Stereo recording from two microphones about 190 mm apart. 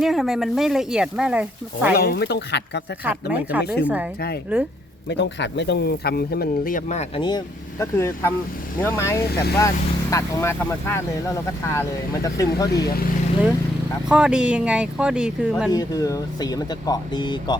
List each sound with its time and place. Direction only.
0.0 s speech: centre (ahead or behind)
2.0 s speech: 55° left (ahead or behind)
3.3 s speech: 5° right (ahead or behind)
5.0 s speech: 65° left (ahead or behind); by 7.1 s 40° left (ahead or behind)
7.2 s speech: 20° left (ahead or behind)
9.3 s speech: 55° left (ahead or behind)
9.6 s speech: 15° left (ahead or behind)
12.7 s speech: 55° left (ahead or behind)
14.1 s speech: 5° right (ahead or behind)
15.7 s speech: 20° left (ahead or behind)